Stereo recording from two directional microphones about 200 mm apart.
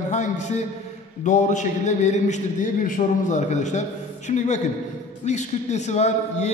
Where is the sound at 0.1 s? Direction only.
35° left (ahead or behind).